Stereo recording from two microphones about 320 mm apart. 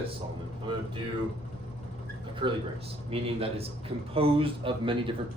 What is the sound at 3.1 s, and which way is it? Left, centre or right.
A man's voice, centre.